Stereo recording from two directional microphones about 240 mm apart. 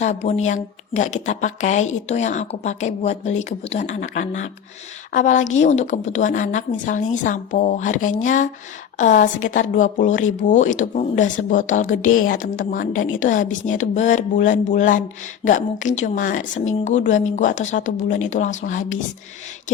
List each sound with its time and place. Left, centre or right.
0.0 s a woman's voice: left